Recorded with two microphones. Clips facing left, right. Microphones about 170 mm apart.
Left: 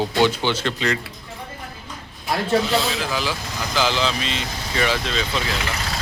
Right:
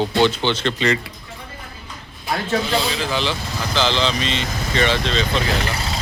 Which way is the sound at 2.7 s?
Centre (ahead or behind).